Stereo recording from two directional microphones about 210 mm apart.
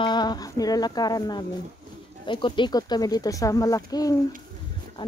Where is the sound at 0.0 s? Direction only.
20° left (ahead or behind).